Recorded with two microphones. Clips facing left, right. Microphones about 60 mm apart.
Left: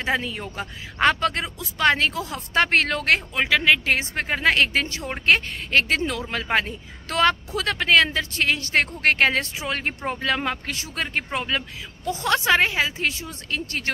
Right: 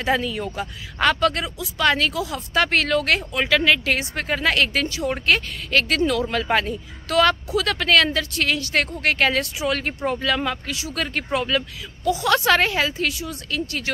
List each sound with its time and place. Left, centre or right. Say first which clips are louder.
0.0 s speech: right 3 dB; left
12.4 s speech: right 1 dB; left
13.1 s speech: right 2 dB; left